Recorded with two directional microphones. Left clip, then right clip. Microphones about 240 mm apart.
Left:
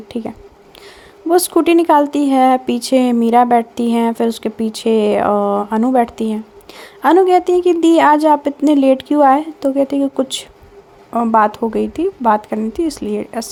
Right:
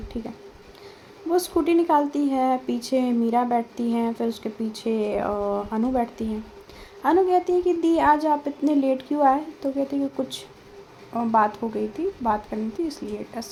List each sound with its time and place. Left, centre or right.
1.3 s speech: left